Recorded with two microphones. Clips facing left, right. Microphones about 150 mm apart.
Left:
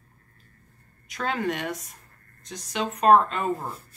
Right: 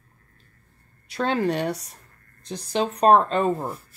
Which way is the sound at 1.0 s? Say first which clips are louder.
Right 5 dB; 30° right (ahead or behind).